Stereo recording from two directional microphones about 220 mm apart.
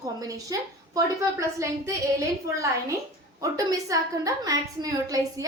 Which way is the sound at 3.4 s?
15° right (ahead or behind).